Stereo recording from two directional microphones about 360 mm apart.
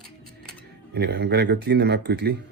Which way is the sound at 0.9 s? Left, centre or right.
Right.